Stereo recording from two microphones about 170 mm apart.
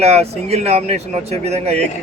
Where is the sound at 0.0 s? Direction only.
40° right (ahead or behind).